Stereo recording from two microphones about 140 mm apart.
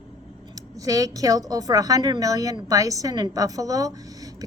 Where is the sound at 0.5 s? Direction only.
25° right (ahead or behind).